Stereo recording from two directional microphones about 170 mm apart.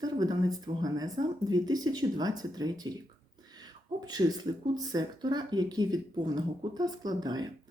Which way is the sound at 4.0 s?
25° right (ahead or behind).